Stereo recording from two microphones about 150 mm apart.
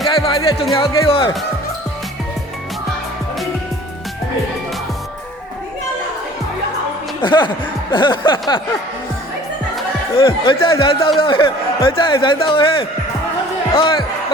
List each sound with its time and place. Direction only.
0.1 s music: 35° left (ahead or behind)
0.8 s speech: 35° left (ahead or behind)
7.2 s speech: 30° left (ahead or behind)
10.2 s speech: 35° left (ahead or behind)